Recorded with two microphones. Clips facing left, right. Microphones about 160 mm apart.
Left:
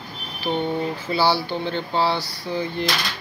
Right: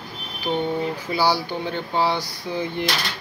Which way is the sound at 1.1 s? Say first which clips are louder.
Left 1 dB; 10° right (ahead or behind).